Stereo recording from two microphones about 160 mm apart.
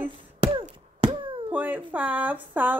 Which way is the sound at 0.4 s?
40° right (ahead or behind).